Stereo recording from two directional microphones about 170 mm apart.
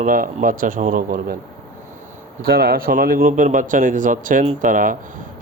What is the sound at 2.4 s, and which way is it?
Speech, 65° right (ahead or behind).